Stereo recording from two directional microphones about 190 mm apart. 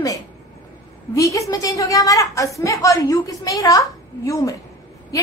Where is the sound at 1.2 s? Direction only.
15° left (ahead or behind).